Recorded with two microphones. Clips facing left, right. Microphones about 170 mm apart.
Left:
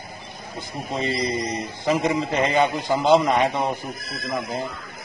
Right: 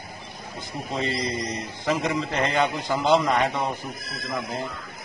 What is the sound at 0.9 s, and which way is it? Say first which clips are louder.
A man's voice: left 3 dB; 15° left (ahead or behind).